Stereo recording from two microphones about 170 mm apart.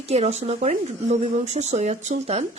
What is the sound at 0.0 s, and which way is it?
Speech, 40° right (ahead or behind).